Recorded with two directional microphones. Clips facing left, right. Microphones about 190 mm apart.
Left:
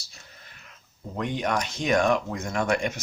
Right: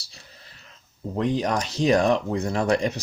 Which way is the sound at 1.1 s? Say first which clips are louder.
Right 4 dB; 35° right (ahead or behind).